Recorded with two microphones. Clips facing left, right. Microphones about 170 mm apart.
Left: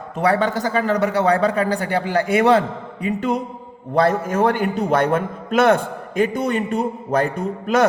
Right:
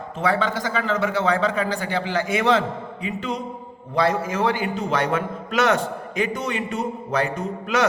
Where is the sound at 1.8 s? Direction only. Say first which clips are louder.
Left 4 dB; 55° left (ahead or behind).